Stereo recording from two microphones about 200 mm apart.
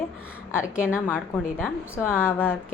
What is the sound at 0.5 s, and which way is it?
A woman's voice, 10° left (ahead or behind).